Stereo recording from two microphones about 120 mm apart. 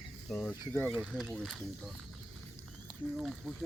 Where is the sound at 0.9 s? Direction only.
5° right (ahead or behind).